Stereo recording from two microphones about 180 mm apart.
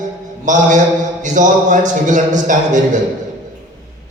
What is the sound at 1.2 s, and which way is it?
A man's voice, 45° right (ahead or behind).